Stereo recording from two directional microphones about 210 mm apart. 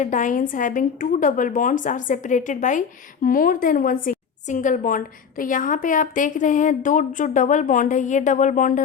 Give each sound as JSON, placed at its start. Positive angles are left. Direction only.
{"t": 0.0, "sound": "a woman's voice", "side_deg": 35}